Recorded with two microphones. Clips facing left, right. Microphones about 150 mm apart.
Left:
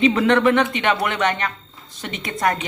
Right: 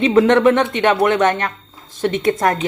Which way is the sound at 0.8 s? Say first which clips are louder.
Right 6 dB; 45° right (ahead or behind).